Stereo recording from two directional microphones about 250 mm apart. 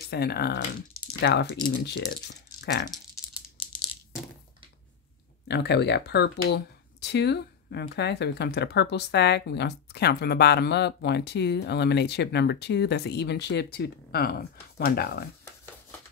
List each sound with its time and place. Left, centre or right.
0.1 s speech: left
5.5 s speech: left